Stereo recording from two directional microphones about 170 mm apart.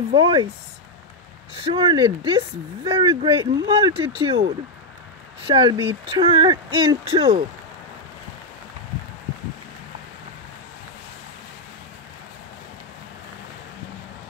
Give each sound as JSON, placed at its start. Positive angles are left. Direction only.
{"t": 0.1, "sound": "speech", "side_deg": -30}
{"t": 1.6, "sound": "speech", "side_deg": -30}
{"t": 5.5, "sound": "speech", "side_deg": -30}